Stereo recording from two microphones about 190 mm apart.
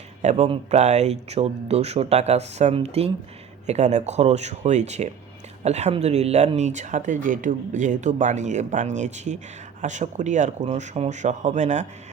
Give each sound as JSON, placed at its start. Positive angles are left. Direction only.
{"t": 0.2, "sound": "speech", "side_deg": -35}